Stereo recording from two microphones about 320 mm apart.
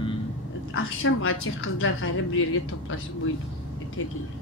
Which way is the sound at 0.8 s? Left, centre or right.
Left.